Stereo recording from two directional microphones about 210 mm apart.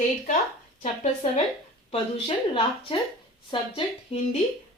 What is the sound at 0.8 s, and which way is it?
Speech, 30° left (ahead or behind).